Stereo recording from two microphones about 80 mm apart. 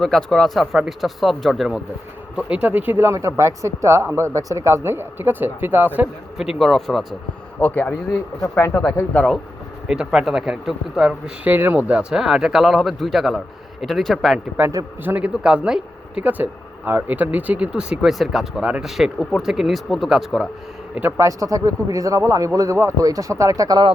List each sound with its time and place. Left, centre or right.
0.0 s speech: centre
2.3 s speech: centre
3.1 s speech: right
6.3 s speech: centre
7.6 s speech: left
8.4 s speech: left
9.1 s speech: centre
9.8 s speech: centre
11.4 s speech: right; by 14.3 s centre
15.0 s speech: right
15.4 s speech: centre
16.4 s speech: right; by 20.5 s centre
21.2 s speech: right